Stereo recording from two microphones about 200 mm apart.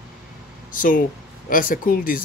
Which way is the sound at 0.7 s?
40° left (ahead or behind).